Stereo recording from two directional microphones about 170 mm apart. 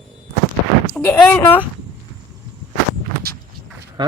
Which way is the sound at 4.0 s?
25° right (ahead or behind).